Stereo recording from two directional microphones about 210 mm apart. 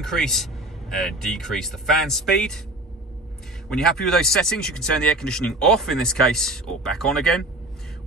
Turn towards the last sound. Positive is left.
turn(degrees=0)  # may be behind; listen again after turning